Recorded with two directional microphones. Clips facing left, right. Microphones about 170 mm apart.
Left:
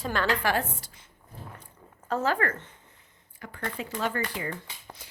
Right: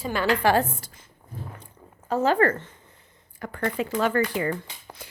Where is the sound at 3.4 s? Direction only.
65° right (ahead or behind).